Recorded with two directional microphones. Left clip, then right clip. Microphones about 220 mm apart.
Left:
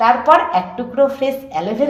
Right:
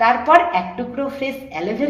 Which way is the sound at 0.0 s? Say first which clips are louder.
Left 1 dB; 30° left (ahead or behind).